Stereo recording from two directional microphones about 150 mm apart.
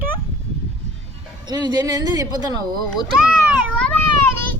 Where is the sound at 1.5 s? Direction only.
25° right (ahead or behind).